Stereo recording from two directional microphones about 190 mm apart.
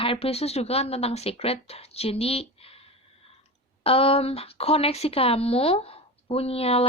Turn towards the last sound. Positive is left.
turn(degrees=30)  # may be behind; listen again after turning